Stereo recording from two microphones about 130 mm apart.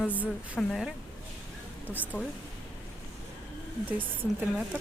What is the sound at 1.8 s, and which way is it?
Speech, 15° left (ahead or behind).